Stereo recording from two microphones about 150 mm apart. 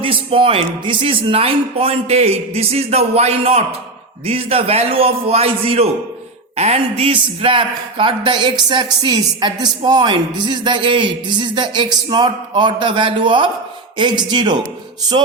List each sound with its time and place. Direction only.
0.0 s a man's voice: 35° right (ahead or behind)